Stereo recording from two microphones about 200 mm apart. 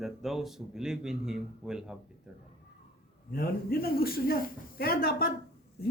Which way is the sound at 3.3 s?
50° left (ahead or behind).